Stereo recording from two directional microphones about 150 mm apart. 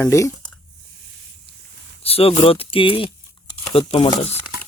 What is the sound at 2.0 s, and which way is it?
Speech, 40° left (ahead or behind).